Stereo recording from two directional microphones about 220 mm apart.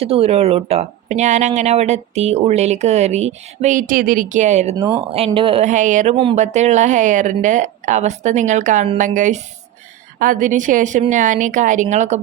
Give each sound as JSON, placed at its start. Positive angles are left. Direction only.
{"t": 0.0, "sound": "speech", "side_deg": -25}
{"t": 4.8, "sound": "speech", "side_deg": -10}
{"t": 5.1, "sound": "speech", "side_deg": -25}